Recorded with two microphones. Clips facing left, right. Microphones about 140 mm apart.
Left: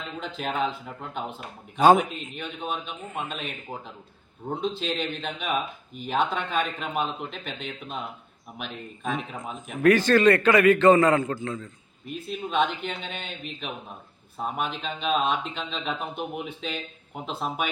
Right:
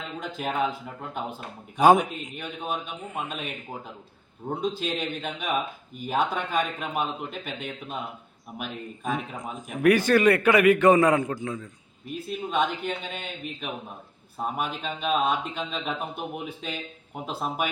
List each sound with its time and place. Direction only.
0.2 s speech: 10° right (ahead or behind)
1.8 s speech: 10° right (ahead or behind)
4.4 s speech: 5° right (ahead or behind)